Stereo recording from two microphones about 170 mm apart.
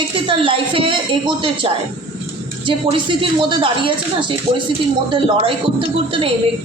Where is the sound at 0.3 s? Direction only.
30° right (ahead or behind).